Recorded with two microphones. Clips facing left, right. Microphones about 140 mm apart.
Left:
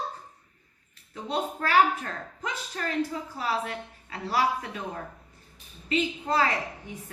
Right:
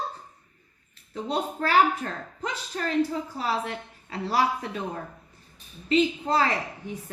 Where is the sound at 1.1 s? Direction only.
30° right (ahead or behind).